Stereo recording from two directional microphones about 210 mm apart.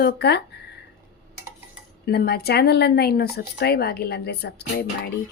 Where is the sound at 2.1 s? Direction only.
50° left (ahead or behind).